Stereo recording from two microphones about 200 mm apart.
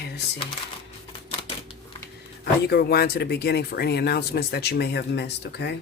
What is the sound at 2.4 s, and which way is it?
Speech, 55° left (ahead or behind).